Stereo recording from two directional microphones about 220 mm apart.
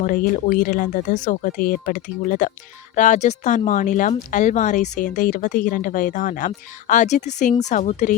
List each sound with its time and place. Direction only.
0.0 s speech: 35° left (ahead or behind)